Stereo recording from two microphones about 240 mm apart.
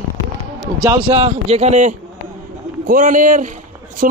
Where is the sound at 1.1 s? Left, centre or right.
Right.